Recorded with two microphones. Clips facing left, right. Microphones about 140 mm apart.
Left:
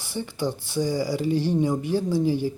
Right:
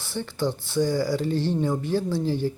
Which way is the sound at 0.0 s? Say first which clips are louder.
Right 1 dB; 15° left (ahead or behind).